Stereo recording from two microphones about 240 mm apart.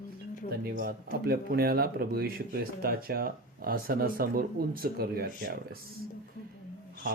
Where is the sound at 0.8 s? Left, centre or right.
Right.